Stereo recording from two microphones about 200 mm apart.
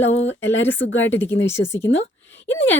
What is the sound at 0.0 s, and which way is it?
A woman's voice, 70° left (ahead or behind).